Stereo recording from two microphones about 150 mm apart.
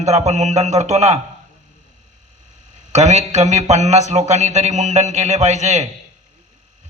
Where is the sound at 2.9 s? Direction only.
50° right (ahead or behind).